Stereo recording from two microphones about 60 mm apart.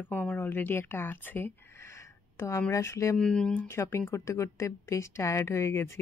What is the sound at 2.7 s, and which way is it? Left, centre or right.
Speech, left.